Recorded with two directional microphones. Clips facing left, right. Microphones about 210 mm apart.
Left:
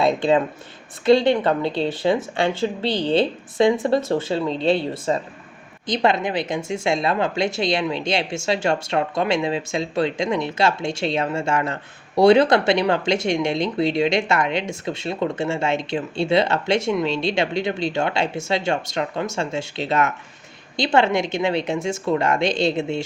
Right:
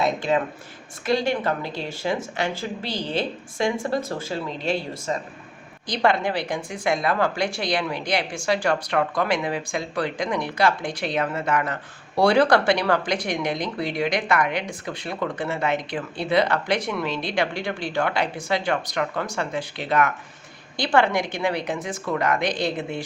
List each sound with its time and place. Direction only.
0.0 s speech: 30° left (ahead or behind)